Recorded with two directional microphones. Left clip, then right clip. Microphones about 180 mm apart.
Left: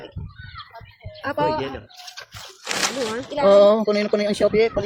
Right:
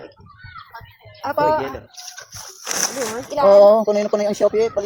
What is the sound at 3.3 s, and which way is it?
Speech, 25° left (ahead or behind).